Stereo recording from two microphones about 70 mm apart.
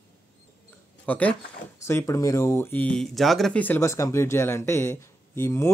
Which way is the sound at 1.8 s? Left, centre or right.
Left.